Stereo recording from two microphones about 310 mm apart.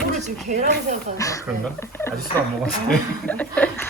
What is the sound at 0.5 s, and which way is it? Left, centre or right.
Speech, right.